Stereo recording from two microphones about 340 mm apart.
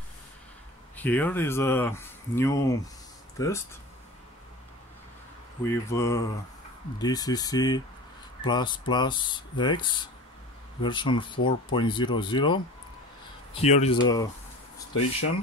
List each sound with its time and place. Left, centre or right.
0.9 s speech: centre
5.7 s speech: centre